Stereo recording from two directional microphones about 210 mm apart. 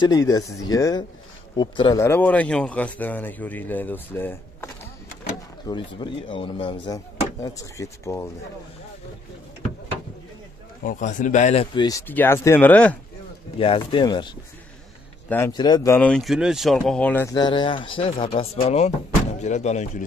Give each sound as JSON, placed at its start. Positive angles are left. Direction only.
{"t": 0.0, "sound": "speech", "side_deg": 20}
{"t": 2.0, "sound": "speech", "side_deg": 10}
{"t": 5.9, "sound": "speech", "side_deg": 25}
{"t": 10.8, "sound": "speech", "side_deg": 40}
{"t": 12.1, "sound": "speech", "side_deg": 10}
{"t": 13.6, "sound": "speech", "side_deg": 25}
{"t": 15.2, "sound": "speech", "side_deg": 10}
{"t": 15.5, "sound": "speech", "side_deg": 20}